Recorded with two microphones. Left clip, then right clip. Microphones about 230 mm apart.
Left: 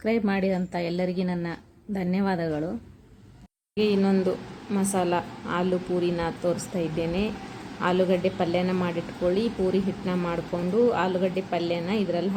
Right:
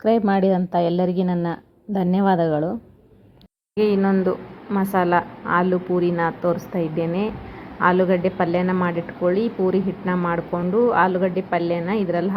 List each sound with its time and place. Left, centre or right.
0.0 s a woman's voice: centre
3.8 s a woman's voice: centre